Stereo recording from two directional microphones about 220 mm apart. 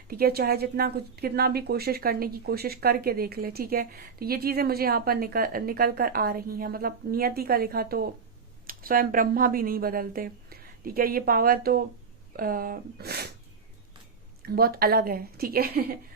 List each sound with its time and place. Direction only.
0.1 s a woman's voice: 45° right (ahead or behind)
14.4 s a woman's voice: 45° right (ahead or behind)